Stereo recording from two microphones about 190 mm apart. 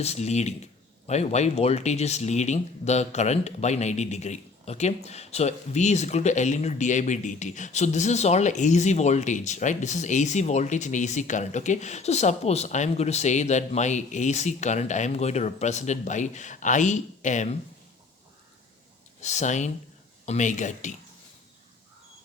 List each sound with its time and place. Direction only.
0.0 s speech: 35° left (ahead or behind)
19.2 s speech: 40° left (ahead or behind)